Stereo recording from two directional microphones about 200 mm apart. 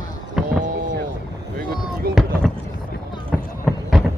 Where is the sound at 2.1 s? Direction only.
50° right (ahead or behind).